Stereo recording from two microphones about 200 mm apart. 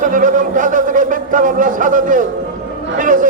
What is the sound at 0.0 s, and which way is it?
A man's voice, 40° right (ahead or behind).